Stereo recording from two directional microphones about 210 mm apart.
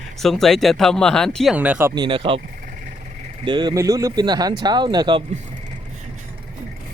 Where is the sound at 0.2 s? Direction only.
Centre (ahead or behind).